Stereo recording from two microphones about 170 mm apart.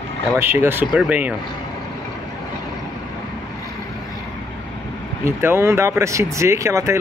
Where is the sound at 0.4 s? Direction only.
15° right (ahead or behind).